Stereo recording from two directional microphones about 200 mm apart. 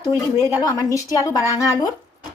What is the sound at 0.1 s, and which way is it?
Speech, 55° right (ahead or behind).